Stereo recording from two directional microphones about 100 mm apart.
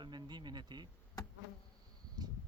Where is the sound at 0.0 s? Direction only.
50° right (ahead or behind).